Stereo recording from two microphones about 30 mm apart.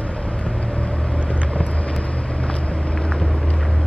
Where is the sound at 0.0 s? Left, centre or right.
Left.